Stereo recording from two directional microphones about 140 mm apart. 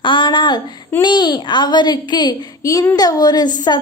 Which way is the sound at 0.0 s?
35° left (ahead or behind).